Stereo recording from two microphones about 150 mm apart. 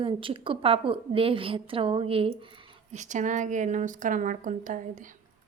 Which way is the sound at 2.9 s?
55° right (ahead or behind).